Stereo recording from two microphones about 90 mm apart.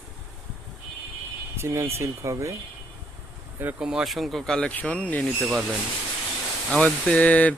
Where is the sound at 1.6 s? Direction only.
30° right (ahead or behind).